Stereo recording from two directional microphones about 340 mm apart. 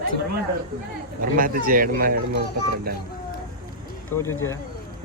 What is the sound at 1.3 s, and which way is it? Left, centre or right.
Speech, right.